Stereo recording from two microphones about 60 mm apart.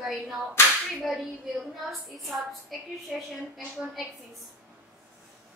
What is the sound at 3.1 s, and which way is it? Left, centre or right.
Speech, centre.